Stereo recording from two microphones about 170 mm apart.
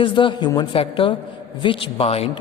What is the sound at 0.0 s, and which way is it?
A man's voice, 30° left (ahead or behind).